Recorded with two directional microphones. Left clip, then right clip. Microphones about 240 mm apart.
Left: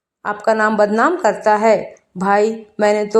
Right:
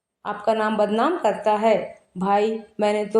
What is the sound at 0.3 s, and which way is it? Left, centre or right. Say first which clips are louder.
A woman's voice: left 6 dB; left.